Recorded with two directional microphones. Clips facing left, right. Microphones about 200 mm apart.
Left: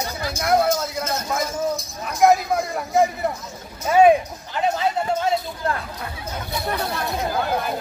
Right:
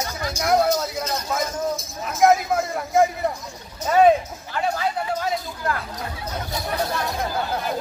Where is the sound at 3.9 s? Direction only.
15° left (ahead or behind).